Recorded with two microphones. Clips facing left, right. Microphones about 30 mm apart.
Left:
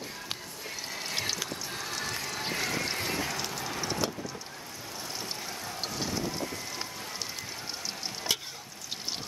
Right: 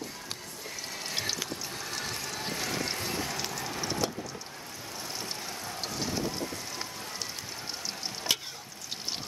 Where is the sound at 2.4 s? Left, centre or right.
Left.